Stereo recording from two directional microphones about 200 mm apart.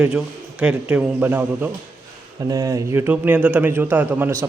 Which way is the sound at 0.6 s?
5° right (ahead or behind).